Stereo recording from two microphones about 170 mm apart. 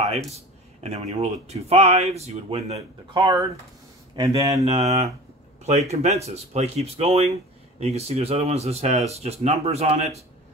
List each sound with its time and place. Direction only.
0.0 s speech: 40° right (ahead or behind); by 4.6 s 20° right (ahead or behind)
4.6 s speech: 40° right (ahead or behind)